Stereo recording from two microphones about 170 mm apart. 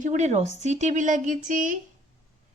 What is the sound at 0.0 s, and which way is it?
A woman's voice, 45° right (ahead or behind).